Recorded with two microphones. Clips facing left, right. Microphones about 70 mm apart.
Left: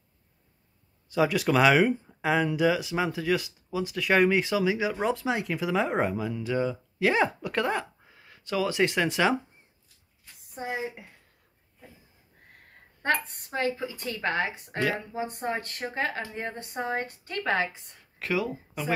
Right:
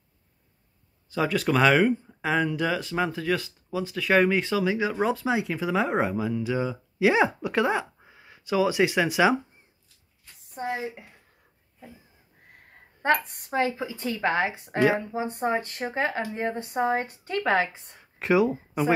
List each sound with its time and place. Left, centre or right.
1.1 s speech: centre
10.5 s speech: centre
13.0 s speech: right